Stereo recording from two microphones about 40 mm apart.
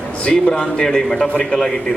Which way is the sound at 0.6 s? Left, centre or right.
Centre.